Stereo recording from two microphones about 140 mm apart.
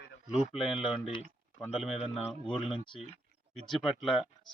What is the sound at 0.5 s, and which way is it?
Speech, centre (ahead or behind).